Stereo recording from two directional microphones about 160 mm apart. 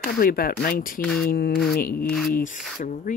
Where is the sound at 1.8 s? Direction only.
65° left (ahead or behind).